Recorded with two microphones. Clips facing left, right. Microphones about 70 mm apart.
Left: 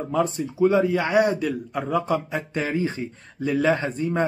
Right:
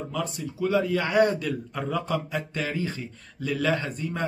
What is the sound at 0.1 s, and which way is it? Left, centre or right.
A man's voice, left.